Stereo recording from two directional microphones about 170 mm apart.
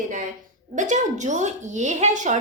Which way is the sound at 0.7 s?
45° right (ahead or behind).